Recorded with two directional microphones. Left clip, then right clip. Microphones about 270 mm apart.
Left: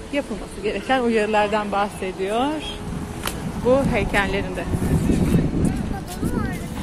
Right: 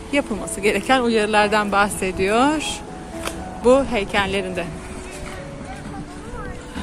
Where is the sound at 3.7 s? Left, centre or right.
Centre.